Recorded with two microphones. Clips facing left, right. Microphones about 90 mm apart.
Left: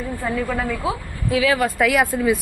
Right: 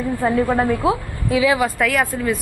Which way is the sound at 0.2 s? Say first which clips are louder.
Right 6 dB; 30° right (ahead or behind).